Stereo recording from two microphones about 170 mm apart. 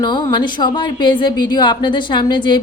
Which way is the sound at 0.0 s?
25° left (ahead or behind).